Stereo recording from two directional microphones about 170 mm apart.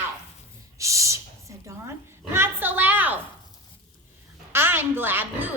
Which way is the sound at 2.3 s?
15° right (ahead or behind).